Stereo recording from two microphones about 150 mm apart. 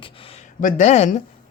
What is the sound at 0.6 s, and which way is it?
Speech, 55° left (ahead or behind).